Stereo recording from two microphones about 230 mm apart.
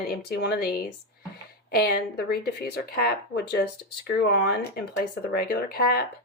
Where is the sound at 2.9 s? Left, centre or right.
Left.